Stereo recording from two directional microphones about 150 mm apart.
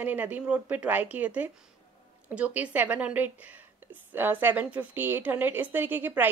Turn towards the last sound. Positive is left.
turn(degrees=-10)  # may be behind; listen again after turning